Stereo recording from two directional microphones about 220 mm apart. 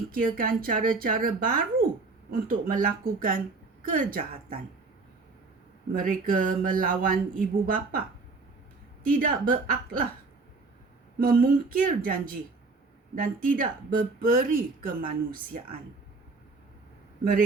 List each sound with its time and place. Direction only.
0.1 s speech: 40° right (ahead or behind)
5.9 s speech: 40° right (ahead or behind)
9.1 s speech: 40° right (ahead or behind)
11.2 s speech: 40° right (ahead or behind)